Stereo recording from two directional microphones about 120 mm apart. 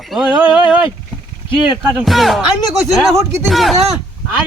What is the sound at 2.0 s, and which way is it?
Speech, centre (ahead or behind).